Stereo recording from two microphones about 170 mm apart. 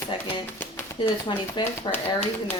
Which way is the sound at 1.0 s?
25° left (ahead or behind).